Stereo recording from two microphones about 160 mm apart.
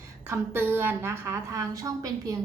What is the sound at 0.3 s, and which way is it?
Speech, 15° right (ahead or behind).